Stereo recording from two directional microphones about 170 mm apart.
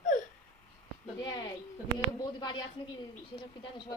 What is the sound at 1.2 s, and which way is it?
Speech, 25° left (ahead or behind).